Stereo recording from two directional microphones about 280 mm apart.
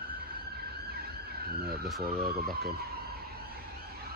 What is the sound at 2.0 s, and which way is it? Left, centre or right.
Speech, right.